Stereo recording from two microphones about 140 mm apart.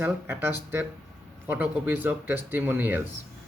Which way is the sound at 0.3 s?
15° right (ahead or behind).